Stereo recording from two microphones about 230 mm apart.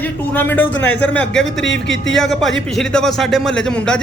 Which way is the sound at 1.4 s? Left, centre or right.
Left.